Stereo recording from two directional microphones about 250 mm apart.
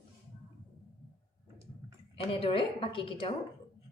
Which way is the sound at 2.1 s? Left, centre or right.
Left.